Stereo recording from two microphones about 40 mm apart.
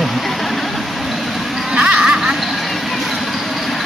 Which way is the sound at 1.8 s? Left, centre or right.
Right.